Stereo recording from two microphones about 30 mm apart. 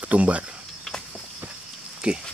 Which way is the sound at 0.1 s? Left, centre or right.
Right.